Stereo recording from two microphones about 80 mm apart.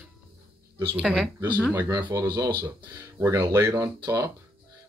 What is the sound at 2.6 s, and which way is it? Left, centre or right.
Speech, right.